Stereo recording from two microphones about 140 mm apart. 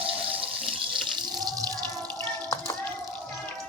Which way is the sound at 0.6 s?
35° right (ahead or behind).